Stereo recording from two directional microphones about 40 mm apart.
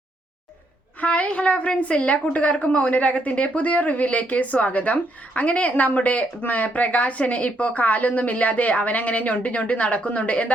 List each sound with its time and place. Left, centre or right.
1.0 s a woman's voice: left